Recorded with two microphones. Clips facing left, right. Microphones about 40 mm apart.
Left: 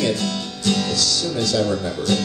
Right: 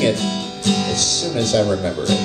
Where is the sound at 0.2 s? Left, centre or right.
Right.